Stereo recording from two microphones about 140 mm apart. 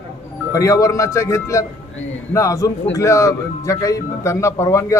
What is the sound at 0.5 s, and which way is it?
A man's voice, 25° left (ahead or behind).